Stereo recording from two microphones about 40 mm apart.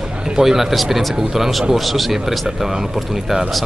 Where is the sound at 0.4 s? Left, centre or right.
Centre.